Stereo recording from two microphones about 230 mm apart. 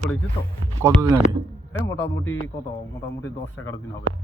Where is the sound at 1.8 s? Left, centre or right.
Centre.